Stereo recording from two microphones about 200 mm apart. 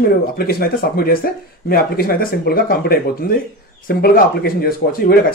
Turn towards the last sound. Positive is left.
turn(degrees=45)  # may be behind; listen again after turning